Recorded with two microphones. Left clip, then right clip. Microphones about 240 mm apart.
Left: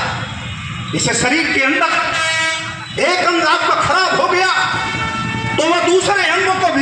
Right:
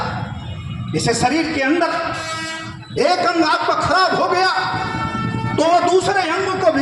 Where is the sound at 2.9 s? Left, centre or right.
Right.